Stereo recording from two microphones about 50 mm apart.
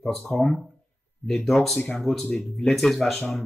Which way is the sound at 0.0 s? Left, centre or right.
Centre.